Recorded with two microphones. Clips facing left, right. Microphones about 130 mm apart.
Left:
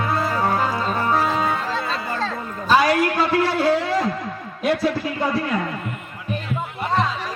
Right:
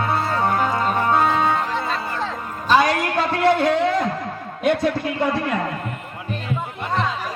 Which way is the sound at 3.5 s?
30° left (ahead or behind).